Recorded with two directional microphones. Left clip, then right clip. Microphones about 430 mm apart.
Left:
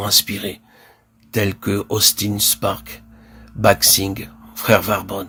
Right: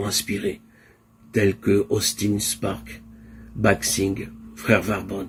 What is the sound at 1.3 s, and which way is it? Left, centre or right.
Speech, left.